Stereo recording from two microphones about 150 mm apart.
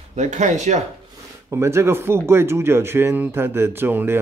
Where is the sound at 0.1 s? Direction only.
50° right (ahead or behind).